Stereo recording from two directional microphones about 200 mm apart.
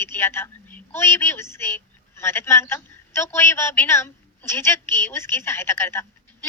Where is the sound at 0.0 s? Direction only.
10° left (ahead or behind).